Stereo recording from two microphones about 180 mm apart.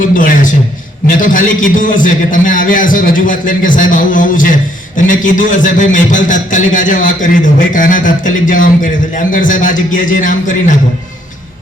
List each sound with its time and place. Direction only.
0.1 s a man's voice: 50° left (ahead or behind)